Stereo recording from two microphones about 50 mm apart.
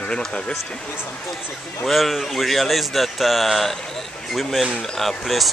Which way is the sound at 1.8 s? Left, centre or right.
Centre.